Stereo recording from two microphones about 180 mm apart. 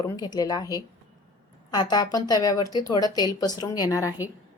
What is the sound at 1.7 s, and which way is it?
Speech, 20° left (ahead or behind).